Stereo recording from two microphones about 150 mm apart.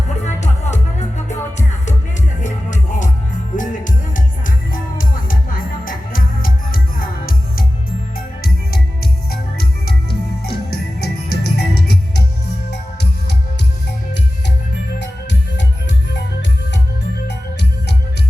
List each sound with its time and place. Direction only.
0.3 s music: 50° left (ahead or behind)
2.4 s music: 55° left (ahead or behind); by 7.6 s 75° left (ahead or behind)
9.3 s music: 90° left
11.0 s music: 90° left